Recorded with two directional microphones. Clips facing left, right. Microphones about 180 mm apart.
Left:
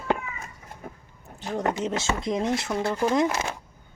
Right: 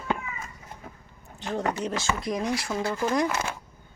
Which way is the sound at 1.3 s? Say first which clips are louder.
Even; 5° left (ahead or behind).